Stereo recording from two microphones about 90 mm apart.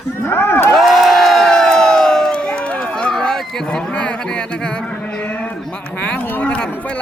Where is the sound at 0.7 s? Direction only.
Centre (ahead or behind).